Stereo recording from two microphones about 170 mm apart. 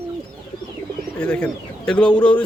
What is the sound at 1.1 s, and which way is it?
Speech, 5° left (ahead or behind).